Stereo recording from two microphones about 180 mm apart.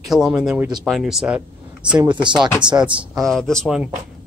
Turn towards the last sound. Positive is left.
turn(degrees=0)  # may be behind; listen again after turning